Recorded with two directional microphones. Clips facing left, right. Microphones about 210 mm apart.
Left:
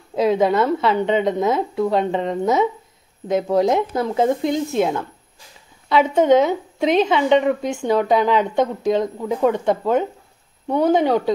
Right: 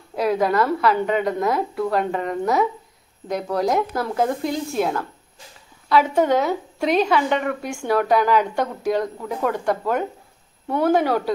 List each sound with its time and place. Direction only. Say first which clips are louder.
0.1 s a woman's voice: left 3 dB; 20° left (ahead or behind)
5.9 s a woman's voice: left 3 dB; 20° left (ahead or behind)